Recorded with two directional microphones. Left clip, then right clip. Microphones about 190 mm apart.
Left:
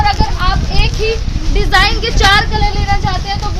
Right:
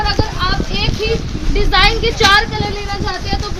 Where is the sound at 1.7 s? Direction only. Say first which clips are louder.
Left 1 dB; 40° left (ahead or behind).